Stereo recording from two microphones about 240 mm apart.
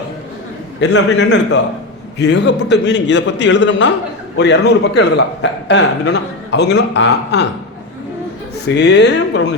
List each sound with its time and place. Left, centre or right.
0.9 s a man's voice: left
8.6 s a man's voice: left